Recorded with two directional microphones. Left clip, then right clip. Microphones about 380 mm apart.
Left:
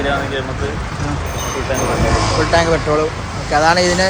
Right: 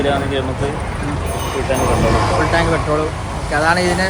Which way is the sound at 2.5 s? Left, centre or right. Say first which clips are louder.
Left 2 dB; centre.